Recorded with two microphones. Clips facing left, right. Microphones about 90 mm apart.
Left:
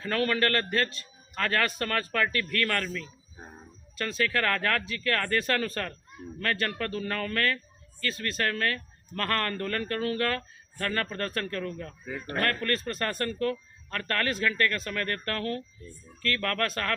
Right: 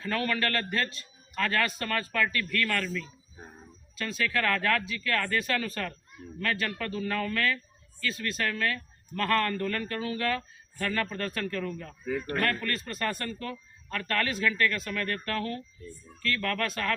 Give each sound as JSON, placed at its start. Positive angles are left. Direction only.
{"t": 0.0, "sound": "speech", "side_deg": 45}
{"t": 3.3, "sound": "speech", "side_deg": 20}
{"t": 4.3, "sound": "speech", "side_deg": 45}